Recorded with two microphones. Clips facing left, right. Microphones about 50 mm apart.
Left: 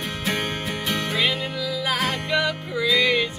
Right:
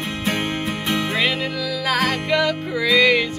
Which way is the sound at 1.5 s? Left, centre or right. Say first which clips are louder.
Right 3 dB; right.